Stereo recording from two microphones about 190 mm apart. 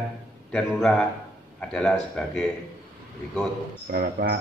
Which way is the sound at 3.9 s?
55° right (ahead or behind).